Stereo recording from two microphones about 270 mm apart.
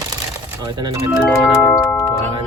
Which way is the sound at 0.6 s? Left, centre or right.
Centre.